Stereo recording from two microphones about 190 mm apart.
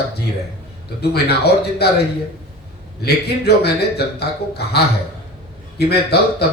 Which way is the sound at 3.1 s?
60° left (ahead or behind).